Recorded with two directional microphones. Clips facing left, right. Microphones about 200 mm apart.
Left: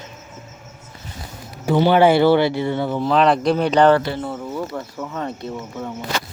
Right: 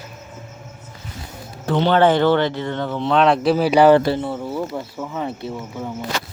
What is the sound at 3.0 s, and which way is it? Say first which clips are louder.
Speech: right 1 dB; centre (ahead or behind).